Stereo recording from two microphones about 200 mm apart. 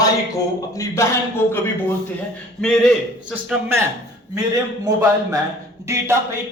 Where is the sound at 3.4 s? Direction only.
5° right (ahead or behind).